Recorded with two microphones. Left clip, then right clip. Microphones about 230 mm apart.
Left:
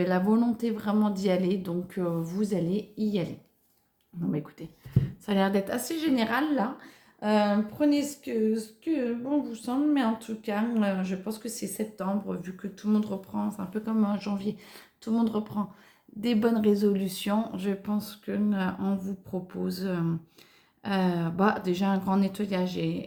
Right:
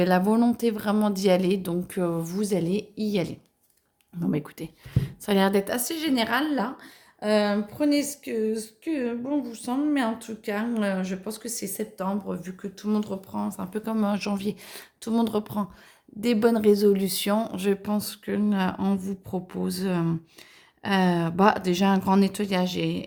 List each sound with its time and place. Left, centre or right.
0.0 s speech: right
16.2 s speech: right